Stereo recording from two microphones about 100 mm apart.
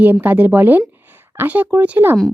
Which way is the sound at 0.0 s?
20° right (ahead or behind).